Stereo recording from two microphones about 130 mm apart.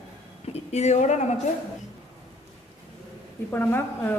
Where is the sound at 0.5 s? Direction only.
55° left (ahead or behind).